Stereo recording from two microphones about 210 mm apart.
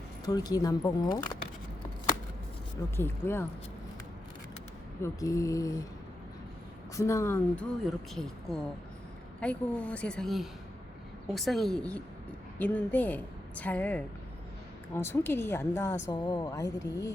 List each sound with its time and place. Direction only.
0.3 s speech: 20° left (ahead or behind)
2.9 s speech: 10° left (ahead or behind)
5.0 s speech: 15° left (ahead or behind)
6.9 s a woman's voice: 15° left (ahead or behind)